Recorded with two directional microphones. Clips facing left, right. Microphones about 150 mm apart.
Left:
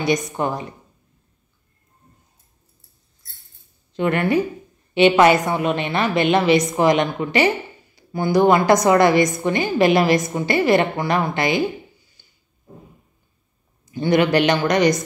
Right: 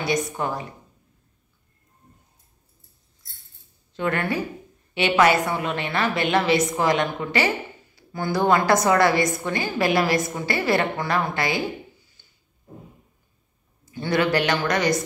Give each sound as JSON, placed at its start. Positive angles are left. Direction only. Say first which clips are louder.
{"t": 0.0, "sound": "speech", "louder": "left 4 dB", "side_deg": 20}
{"t": 3.9, "sound": "speech", "louder": "left 6 dB", "side_deg": 20}
{"t": 13.9, "sound": "speech", "louder": "left 5 dB", "side_deg": 20}